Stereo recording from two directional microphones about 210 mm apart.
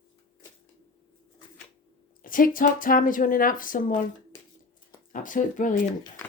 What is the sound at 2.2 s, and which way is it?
Speech, 40° left (ahead or behind).